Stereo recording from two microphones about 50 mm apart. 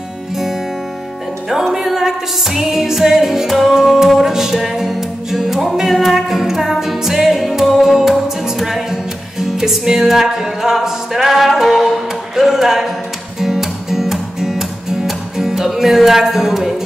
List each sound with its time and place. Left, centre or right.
1.5 s music: centre